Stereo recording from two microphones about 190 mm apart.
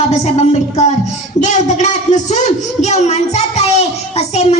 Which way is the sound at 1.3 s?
40° left (ahead or behind).